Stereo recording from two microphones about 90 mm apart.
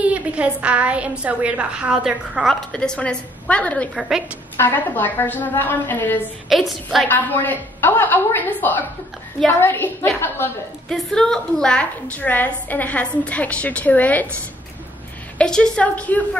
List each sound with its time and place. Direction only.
0.0 s a woman's voice: 15° right (ahead or behind)
2.4 s a woman's voice: 10° left (ahead or behind)
4.6 s a woman's voice: 25° left (ahead or behind)
6.7 s a woman's voice: centre (ahead or behind)
7.1 s a woman's voice: 25° left (ahead or behind)
10.9 s a woman's voice: 5° left (ahead or behind)
15.3 s a woman's voice: 10° left (ahead or behind)